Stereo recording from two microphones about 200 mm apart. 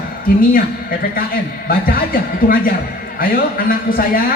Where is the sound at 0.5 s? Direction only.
45° left (ahead or behind).